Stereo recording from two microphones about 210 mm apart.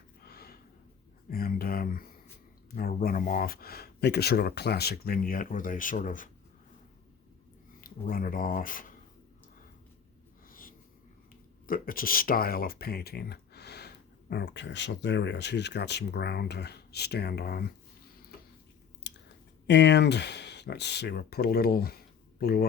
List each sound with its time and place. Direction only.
0.2 s a sound: 45° left (ahead or behind)
1.3 s speech: 45° left (ahead or behind)
7.8 s speech: 45° left (ahead or behind)
10.5 s wheeze: 40° left (ahead or behind)
11.6 s speech: 45° left (ahead or behind)
19.1 s chewing: 55° left (ahead or behind)
19.6 s speech: 55° left (ahead or behind)